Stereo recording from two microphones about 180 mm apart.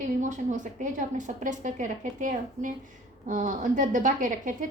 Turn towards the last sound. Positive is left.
turn(degrees=-45)  # may be behind; listen again after turning